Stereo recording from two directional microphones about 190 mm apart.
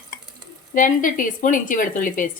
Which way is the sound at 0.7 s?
45° left (ahead or behind).